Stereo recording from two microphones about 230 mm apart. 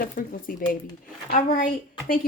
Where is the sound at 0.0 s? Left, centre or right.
Left.